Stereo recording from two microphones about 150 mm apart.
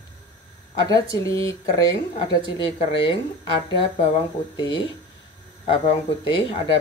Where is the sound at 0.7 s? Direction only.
25° left (ahead or behind).